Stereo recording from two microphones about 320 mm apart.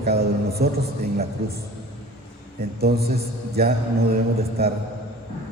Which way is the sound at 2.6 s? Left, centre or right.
Right.